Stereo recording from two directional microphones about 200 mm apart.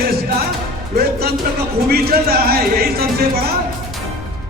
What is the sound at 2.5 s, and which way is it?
Speech, 50° right (ahead or behind).